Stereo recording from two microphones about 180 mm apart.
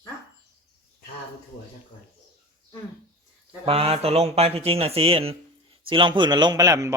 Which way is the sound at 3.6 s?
35° right (ahead or behind).